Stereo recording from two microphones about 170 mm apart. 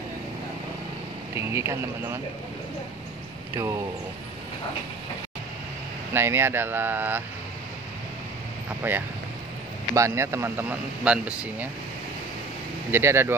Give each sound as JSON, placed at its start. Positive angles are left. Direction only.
{"t": 1.3, "sound": "speech", "side_deg": -15}
{"t": 3.5, "sound": "speech", "side_deg": -15}
{"t": 6.1, "sound": "speech", "side_deg": -15}
{"t": 8.8, "sound": "speech", "side_deg": -10}
{"t": 12.9, "sound": "speech", "side_deg": -15}